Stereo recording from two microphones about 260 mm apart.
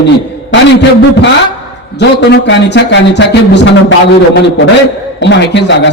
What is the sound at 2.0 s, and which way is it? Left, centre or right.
A man's voice, left.